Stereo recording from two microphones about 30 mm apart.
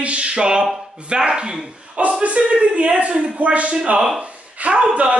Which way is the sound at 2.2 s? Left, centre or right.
Right.